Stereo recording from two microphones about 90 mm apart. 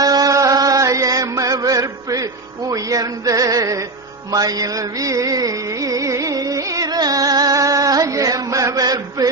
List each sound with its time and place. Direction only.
0.0 s mantra: 45° right (ahead or behind)
4.3 s music: 45° right (ahead or behind)